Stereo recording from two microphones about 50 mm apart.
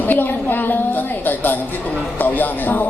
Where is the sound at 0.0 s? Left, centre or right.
Left.